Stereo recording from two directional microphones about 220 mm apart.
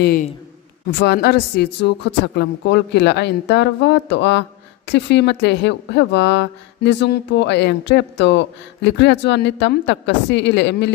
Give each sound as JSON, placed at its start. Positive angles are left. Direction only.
{"t": 0.9, "sound": "speech", "side_deg": 50}